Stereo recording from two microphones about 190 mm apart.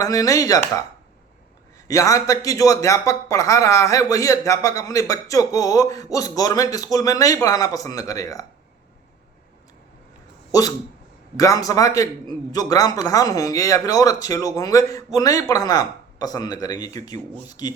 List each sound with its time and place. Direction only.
0.0 s speech: 20° left (ahead or behind)
1.9 s speech: 15° left (ahead or behind)
11.3 s speech: 20° left (ahead or behind)